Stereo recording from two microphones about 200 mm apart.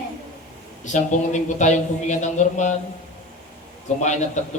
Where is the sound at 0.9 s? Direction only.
35° left (ahead or behind).